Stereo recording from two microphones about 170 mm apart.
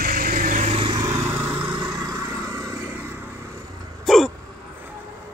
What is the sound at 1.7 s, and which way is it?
Vehicle, 25° right (ahead or behind).